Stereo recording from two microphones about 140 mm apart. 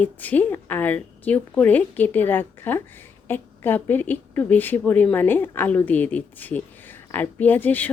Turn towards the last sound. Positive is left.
turn(degrees=15)  # may be behind; listen again after turning